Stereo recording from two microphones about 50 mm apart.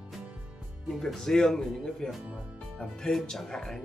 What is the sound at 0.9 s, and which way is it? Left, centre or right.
Speech, centre.